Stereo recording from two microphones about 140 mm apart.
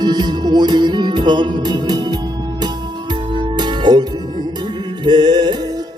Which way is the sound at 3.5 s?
30° right (ahead or behind).